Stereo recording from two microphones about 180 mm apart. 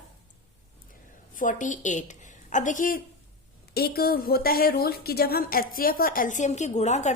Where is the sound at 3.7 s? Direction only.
60° left (ahead or behind).